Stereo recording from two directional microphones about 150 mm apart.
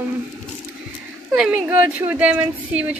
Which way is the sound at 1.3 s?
5° right (ahead or behind).